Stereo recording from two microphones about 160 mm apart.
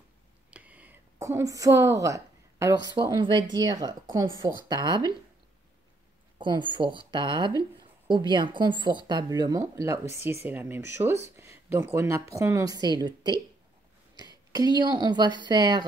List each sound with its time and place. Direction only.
0.5 s a sound: 10° right (ahead or behind)
2.9 s speech: 30° right (ahead or behind)
6.3 s speech: 30° right (ahead or behind)